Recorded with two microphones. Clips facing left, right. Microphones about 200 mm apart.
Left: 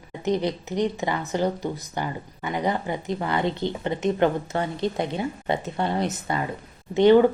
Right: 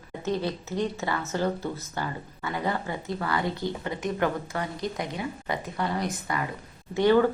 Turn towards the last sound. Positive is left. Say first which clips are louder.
# left 5 dB
turn(degrees=20)  # may be behind; listen again after turning